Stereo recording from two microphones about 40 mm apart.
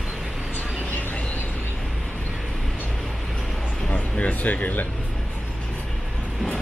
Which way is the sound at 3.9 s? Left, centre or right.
Left.